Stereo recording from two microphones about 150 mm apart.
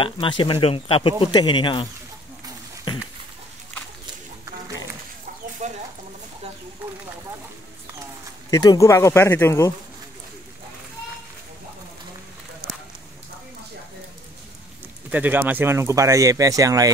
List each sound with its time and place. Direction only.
0.0 s speech: 35° left (ahead or behind)
5.6 s chicken: 50° right (ahead or behind)
8.5 s speech: 25° left (ahead or behind)
15.0 s speech: 10° right (ahead or behind)